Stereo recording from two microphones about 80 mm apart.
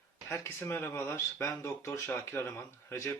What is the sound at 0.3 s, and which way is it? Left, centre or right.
Speech, left.